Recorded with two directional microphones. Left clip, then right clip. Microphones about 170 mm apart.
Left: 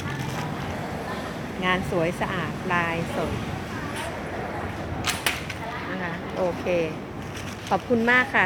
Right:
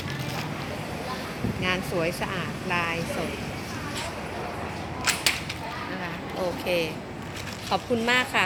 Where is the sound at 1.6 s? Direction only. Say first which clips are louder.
Left 3 dB; 55° left (ahead or behind).